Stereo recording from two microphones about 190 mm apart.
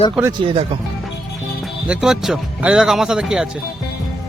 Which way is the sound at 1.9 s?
Centre (ahead or behind).